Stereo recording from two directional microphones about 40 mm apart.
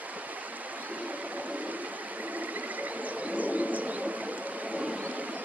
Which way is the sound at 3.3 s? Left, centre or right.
Right.